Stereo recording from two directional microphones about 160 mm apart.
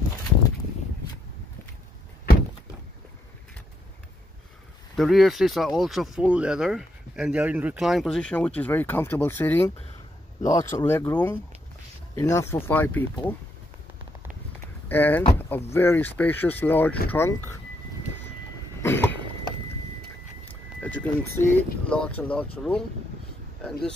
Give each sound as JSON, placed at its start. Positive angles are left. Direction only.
{"t": 4.9, "sound": "speech", "side_deg": 0}
{"t": 14.9, "sound": "speech", "side_deg": 10}
{"t": 18.8, "sound": "cough", "side_deg": 15}
{"t": 20.8, "sound": "speech", "side_deg": 10}